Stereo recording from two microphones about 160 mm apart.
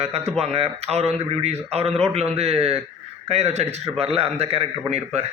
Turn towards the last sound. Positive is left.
turn(degrees=-40)  # may be behind; listen again after turning